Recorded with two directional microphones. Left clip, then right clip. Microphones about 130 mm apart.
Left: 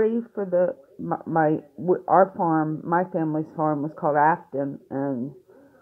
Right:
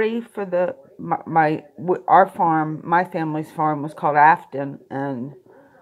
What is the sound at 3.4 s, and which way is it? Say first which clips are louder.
Speech: right 3 dB; 40° right (ahead or behind).